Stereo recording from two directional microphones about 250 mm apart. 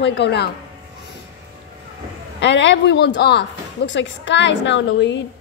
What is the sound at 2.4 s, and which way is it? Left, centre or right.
Speech, left.